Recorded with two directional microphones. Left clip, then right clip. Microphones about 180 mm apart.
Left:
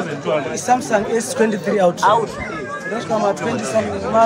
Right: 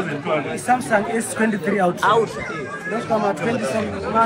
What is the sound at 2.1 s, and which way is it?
Speech, 65° left (ahead or behind).